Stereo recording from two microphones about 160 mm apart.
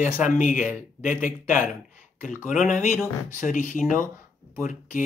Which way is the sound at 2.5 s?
55° left (ahead or behind).